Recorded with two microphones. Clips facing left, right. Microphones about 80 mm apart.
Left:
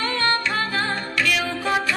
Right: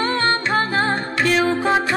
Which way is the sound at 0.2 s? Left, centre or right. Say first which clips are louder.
Right 3 dB; right.